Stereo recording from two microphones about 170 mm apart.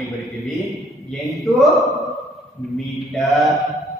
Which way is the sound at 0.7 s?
Centre (ahead or behind).